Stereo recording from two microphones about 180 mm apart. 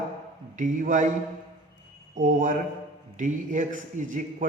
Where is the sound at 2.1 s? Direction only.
45° right (ahead or behind).